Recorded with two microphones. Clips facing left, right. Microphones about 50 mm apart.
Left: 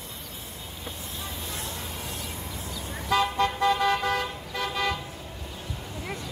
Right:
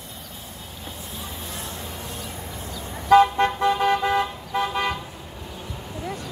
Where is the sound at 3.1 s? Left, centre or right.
Right.